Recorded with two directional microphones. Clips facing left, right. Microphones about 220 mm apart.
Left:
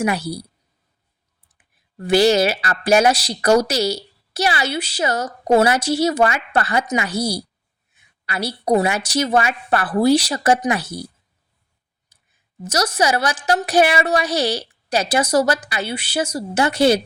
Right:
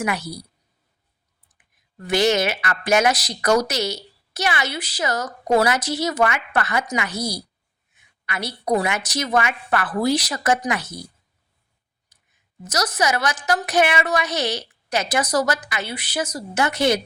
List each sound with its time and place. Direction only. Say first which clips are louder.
0.0 s speech: left 5 dB; 30° left (ahead or behind)
1.5 s speech: left 6 dB; 30° left (ahead or behind)
12.6 s speech: left 3 dB; 30° left (ahead or behind)